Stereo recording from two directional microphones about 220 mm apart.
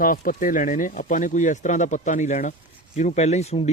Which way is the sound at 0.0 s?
40° left (ahead or behind).